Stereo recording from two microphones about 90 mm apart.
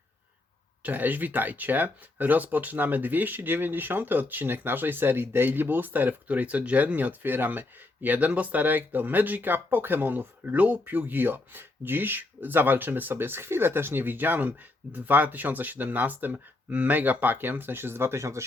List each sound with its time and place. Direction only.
0.8 s speech: 20° right (ahead or behind)